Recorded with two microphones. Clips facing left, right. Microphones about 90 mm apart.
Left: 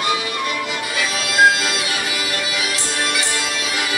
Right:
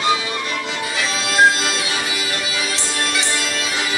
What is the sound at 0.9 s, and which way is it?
Music, 25° right (ahead or behind).